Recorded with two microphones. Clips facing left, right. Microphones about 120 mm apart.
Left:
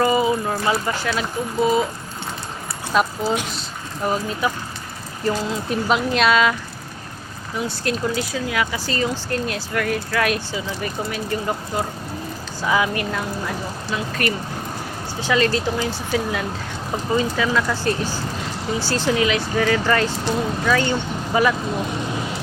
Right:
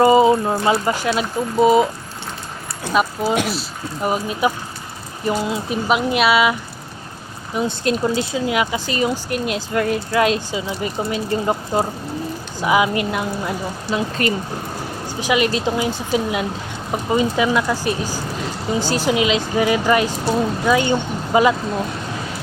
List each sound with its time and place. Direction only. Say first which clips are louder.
0.0 s a sound: right 6 dB; 25° right (ahead or behind)
1.6 s speech: right 5 dB; 20° right (ahead or behind)
2.9 s speech: right 2 dB; 5° right (ahead or behind)
7.5 s speech: right 4 dB; 20° right (ahead or behind)
12.5 s speech: right 4 dB; 15° right (ahead or behind)